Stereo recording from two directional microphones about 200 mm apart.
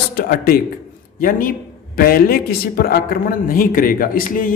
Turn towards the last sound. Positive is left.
turn(degrees=45)  # may be behind; listen again after turning